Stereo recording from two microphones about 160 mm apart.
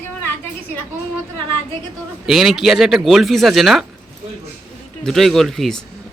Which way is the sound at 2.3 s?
Centre (ahead or behind).